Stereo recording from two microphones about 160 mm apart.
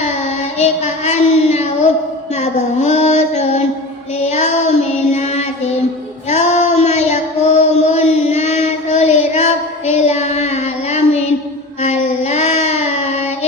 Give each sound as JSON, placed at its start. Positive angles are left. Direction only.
{"t": 0.0, "sound": "child singing", "side_deg": 45}
{"t": 2.3, "sound": "female singing", "side_deg": 45}
{"t": 4.3, "sound": "child singing", "side_deg": 45}